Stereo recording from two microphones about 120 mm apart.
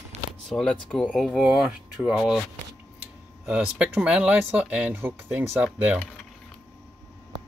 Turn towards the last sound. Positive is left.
turn(degrees=-10)  # may be behind; listen again after turning